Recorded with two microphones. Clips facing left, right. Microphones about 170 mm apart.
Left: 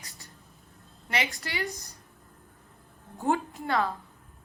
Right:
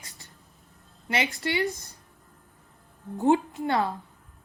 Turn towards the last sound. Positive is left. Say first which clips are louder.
# right 2 dB
turn(degrees=-25)  # may be behind; listen again after turning